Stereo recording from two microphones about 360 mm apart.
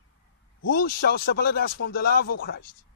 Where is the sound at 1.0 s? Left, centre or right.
Left.